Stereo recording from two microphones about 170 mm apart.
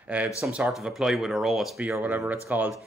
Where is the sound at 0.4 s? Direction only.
5° right (ahead or behind).